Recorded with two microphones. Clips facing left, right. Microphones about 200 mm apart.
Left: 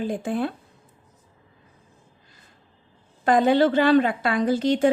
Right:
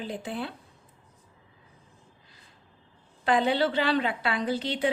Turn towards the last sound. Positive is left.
turn(degrees=45)  # may be behind; listen again after turning